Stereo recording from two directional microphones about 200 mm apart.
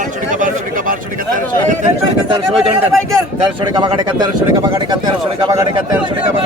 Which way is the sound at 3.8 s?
25° right (ahead or behind).